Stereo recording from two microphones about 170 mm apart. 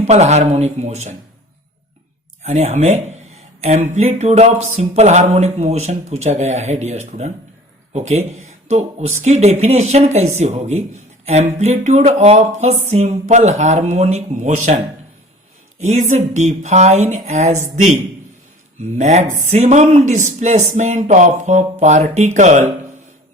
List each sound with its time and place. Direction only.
0.0 s speech: 40° right (ahead or behind)
2.4 s speech: 40° right (ahead or behind)
15.8 s speech: 45° right (ahead or behind)